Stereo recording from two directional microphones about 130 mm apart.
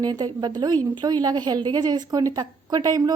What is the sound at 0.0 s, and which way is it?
Speech, 30° right (ahead or behind).